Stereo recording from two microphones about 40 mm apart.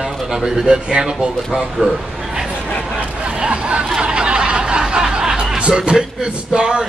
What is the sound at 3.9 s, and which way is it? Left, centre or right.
Snicker, right.